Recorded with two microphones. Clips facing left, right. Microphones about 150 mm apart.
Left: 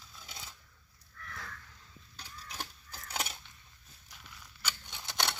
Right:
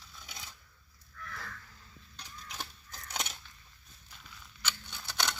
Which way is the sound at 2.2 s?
10° left (ahead or behind).